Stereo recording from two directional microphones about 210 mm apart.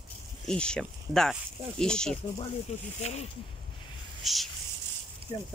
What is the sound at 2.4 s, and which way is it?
Speech, 30° left (ahead or behind).